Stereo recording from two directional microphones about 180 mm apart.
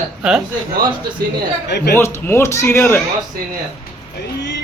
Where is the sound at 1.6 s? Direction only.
70° left (ahead or behind).